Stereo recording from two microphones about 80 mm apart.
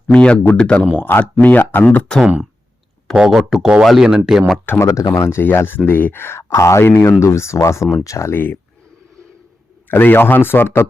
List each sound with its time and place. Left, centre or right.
0.1 s speech: centre
0.9 s speech: left
2.2 s speech: centre
4.6 s speech: left
4.9 s speech: left
5.3 s speech: left
9.9 s speech: left